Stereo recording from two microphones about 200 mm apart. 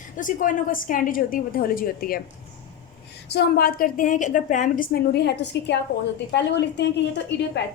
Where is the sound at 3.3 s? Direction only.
55° left (ahead or behind).